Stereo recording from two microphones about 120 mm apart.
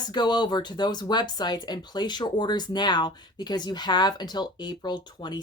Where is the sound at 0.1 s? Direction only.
35° left (ahead or behind).